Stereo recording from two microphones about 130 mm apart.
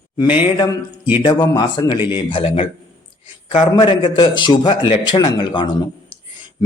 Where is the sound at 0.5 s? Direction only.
35° left (ahead or behind).